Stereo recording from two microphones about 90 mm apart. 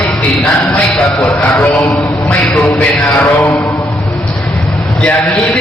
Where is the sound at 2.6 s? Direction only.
10° left (ahead or behind).